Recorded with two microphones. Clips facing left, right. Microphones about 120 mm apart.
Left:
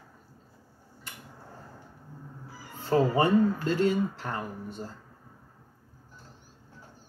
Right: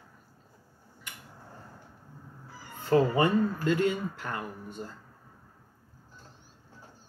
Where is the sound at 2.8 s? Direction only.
30° left (ahead or behind).